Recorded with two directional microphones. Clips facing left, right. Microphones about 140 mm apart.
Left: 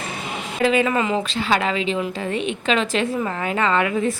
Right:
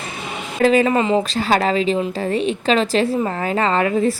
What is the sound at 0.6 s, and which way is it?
A woman's voice, 40° right (ahead or behind).